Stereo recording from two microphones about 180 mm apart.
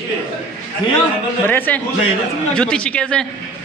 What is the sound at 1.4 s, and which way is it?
A man's voice, 10° left (ahead or behind).